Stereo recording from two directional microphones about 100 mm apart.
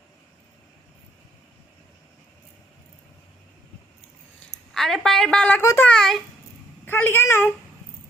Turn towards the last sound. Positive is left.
turn(degrees=25)  # may be behind; listen again after turning